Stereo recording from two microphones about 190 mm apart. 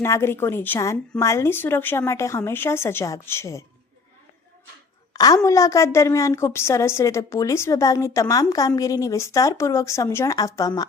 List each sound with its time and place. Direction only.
0.0 s a woman's voice: 15° left (ahead or behind)
5.1 s a woman's voice: 20° left (ahead or behind)